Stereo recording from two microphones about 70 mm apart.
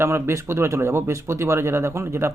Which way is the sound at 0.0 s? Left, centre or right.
Right.